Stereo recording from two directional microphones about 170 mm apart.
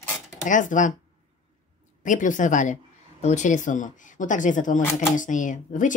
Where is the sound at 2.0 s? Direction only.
50° left (ahead or behind).